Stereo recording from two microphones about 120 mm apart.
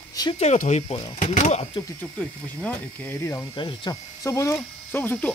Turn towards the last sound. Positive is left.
turn(degrees=15)  # may be behind; listen again after turning